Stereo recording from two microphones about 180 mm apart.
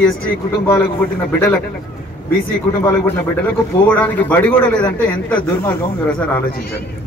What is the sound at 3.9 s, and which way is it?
A man's voice, 10° left (ahead or behind).